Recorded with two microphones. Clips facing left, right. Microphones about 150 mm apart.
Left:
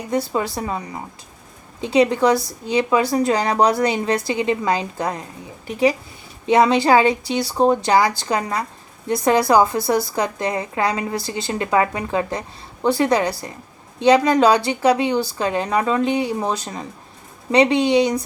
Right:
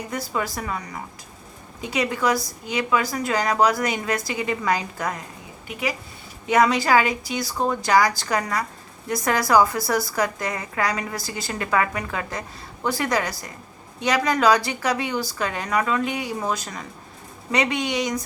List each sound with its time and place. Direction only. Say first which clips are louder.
0.3 s a woman's voice: left 4 dB; 25° left (ahead or behind)